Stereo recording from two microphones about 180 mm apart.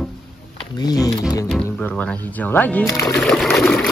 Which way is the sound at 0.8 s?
20° left (ahead or behind).